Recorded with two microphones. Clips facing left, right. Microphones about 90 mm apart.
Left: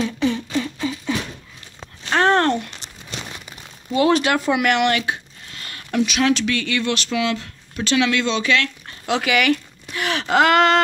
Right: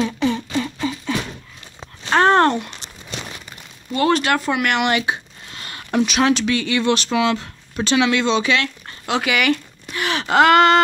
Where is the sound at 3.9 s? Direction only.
10° left (ahead or behind).